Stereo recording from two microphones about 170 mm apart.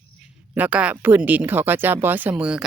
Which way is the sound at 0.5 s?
10° right (ahead or behind).